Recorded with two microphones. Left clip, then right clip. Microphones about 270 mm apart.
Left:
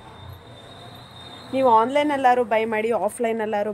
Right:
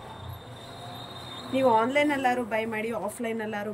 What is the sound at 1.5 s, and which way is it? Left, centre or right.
A woman's voice, centre.